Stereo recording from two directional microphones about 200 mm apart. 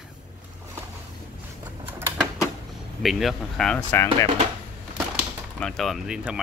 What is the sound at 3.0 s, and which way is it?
Speech, centre (ahead or behind).